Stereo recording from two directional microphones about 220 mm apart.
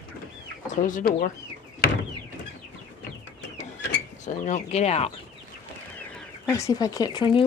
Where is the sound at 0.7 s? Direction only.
35° left (ahead or behind).